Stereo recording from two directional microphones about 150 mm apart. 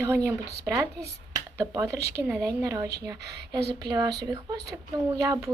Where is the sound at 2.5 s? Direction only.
20° right (ahead or behind).